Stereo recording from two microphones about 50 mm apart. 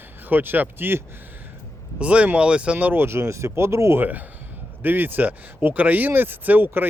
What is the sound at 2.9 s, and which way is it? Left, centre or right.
Speech, right.